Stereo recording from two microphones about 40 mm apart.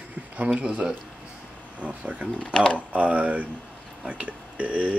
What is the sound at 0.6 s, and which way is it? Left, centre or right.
Speech, right.